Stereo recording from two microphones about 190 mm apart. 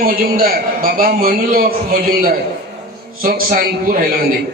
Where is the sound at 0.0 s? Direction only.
50° right (ahead or behind).